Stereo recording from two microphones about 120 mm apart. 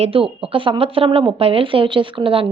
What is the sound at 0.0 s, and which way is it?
A woman's voice, 50° right (ahead or behind).